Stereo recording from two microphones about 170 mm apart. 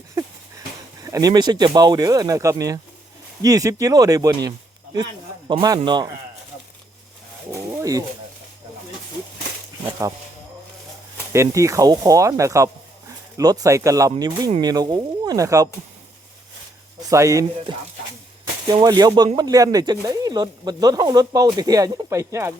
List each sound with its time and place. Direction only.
1.0 s speech: 20° right (ahead or behind)
7.7 s bird: 20° right (ahead or behind)
11.3 s speech: 15° right (ahead or behind)
17.1 s speech: 20° right (ahead or behind)